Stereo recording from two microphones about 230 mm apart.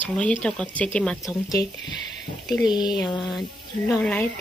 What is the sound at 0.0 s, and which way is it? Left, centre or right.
Speech, centre.